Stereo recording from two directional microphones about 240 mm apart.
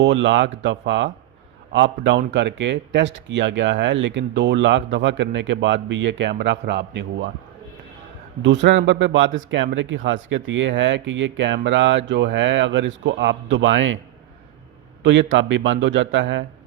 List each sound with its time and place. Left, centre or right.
0.0 s speech: right
8.4 s speech: right
15.0 s speech: right